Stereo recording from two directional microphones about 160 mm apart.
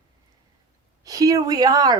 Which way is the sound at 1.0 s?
20° right (ahead or behind).